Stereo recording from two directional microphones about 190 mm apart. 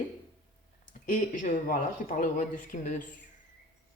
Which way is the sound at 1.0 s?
45° left (ahead or behind).